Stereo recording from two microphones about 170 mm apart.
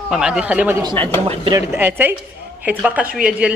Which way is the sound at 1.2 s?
30° right (ahead or behind).